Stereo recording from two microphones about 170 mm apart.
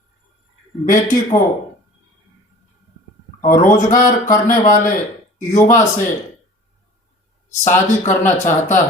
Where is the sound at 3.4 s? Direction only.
50° left (ahead or behind).